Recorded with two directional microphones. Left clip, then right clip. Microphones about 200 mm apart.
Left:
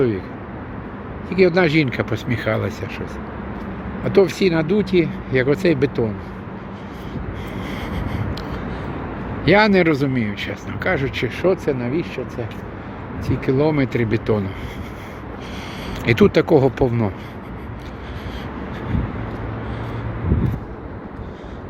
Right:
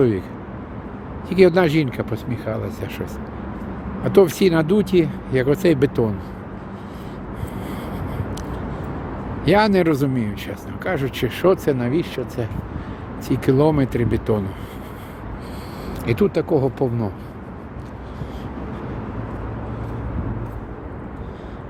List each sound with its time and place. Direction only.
1.3 s speech: 20° right (ahead or behind); by 2.7 s 5° left (ahead or behind)
4.0 s speech: 20° right (ahead or behind)
7.6 s a sound: centre (ahead or behind)
9.4 s speech: 5° right (ahead or behind)
11.3 s speech: 25° right (ahead or behind)
13.7 s speech: 5° right (ahead or behind)
15.9 s speech: 5° left (ahead or behind)